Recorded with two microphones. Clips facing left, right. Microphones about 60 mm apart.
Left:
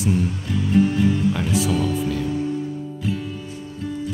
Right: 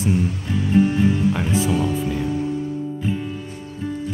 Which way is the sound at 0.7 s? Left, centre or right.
Centre.